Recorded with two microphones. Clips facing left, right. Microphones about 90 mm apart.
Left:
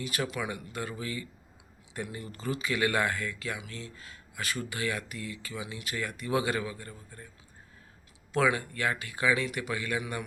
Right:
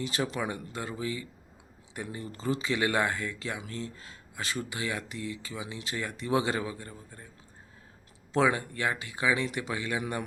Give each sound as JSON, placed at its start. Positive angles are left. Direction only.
{"t": 0.0, "sound": "speech", "side_deg": -30}
{"t": 3.6, "sound": "speech", "side_deg": -35}
{"t": 8.3, "sound": "speech", "side_deg": -25}
{"t": 10.0, "sound": "a man's voice", "side_deg": -35}